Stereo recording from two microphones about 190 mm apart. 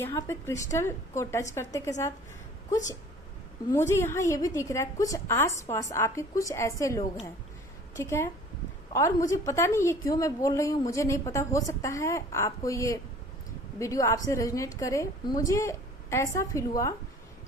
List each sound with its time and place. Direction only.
0.0 s a woman's voice: 15° left (ahead or behind)